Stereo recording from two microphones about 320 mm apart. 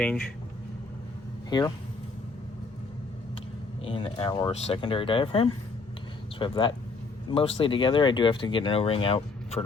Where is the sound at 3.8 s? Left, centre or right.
Centre.